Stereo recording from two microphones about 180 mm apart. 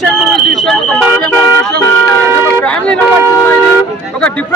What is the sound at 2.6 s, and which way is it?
Speech, 5° left (ahead or behind).